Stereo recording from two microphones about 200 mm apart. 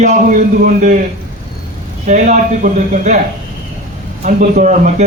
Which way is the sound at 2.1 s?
40° right (ahead or behind).